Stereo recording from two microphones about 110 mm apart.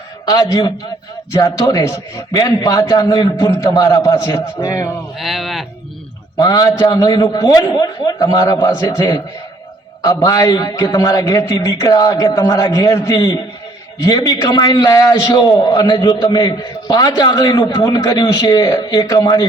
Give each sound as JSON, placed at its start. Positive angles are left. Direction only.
{"t": 0.3, "sound": "a man's voice", "side_deg": 30}
{"t": 5.1, "sound": "speech", "side_deg": 0}
{"t": 6.3, "sound": "a man's voice", "side_deg": 35}
{"t": 14.3, "sound": "a man's voice", "side_deg": 40}
{"t": 18.0, "sound": "a man's voice", "side_deg": 35}